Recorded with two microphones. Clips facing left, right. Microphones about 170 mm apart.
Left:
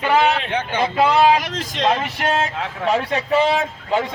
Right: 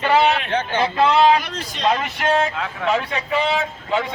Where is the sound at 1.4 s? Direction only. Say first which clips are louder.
Left 3 dB; 90° left.